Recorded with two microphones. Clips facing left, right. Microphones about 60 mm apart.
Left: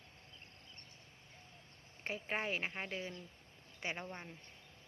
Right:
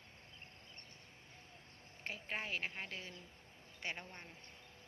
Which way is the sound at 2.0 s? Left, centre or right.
Left.